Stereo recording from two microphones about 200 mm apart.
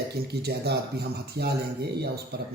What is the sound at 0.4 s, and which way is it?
A man's voice, 55° right (ahead or behind).